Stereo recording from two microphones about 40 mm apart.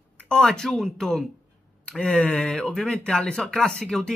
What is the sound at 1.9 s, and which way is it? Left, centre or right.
Speech, left.